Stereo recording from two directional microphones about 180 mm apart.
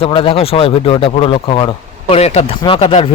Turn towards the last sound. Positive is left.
turn(degrees=30)  # may be behind; listen again after turning